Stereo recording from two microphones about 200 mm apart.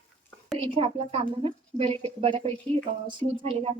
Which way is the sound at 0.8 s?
25° right (ahead or behind).